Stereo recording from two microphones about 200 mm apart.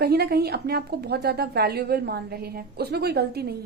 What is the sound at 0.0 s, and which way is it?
Speech, 55° right (ahead or behind).